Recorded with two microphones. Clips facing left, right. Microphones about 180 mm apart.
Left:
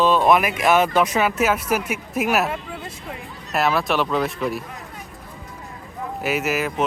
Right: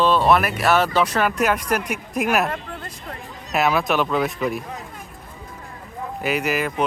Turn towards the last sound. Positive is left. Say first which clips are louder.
# even
turn(degrees=0)  # may be behind; listen again after turning